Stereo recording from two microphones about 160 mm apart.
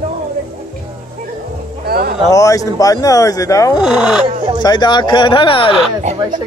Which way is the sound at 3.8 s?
5° right (ahead or behind).